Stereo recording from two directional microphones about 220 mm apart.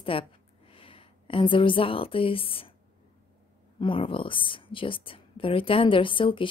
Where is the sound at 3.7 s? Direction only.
25° left (ahead or behind).